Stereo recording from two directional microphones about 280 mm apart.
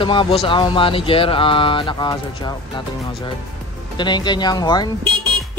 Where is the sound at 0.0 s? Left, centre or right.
Centre.